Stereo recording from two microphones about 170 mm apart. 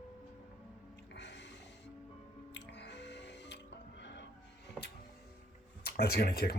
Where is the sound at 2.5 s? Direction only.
90° left.